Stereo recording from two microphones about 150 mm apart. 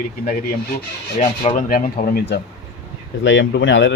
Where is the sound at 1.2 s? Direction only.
45° left (ahead or behind).